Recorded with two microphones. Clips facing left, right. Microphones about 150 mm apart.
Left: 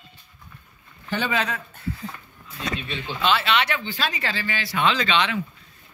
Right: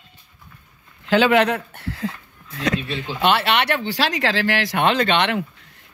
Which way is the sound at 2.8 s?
35° right (ahead or behind).